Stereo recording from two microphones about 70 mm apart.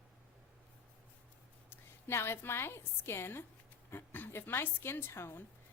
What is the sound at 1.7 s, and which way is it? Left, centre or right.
A woman's voice, left.